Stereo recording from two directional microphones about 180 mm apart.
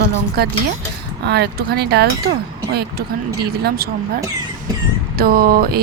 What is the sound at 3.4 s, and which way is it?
Speech, 60° right (ahead or behind).